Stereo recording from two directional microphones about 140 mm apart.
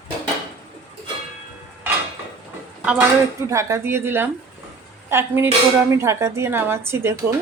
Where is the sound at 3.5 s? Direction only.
20° right (ahead or behind).